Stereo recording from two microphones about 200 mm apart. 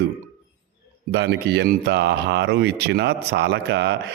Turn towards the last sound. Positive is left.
turn(degrees=-55)  # may be behind; listen again after turning